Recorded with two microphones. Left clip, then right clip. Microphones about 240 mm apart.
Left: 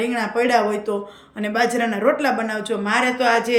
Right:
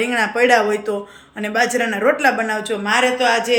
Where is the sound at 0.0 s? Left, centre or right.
Centre.